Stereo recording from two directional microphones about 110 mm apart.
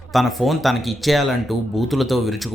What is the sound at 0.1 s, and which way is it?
Speech, centre (ahead or behind).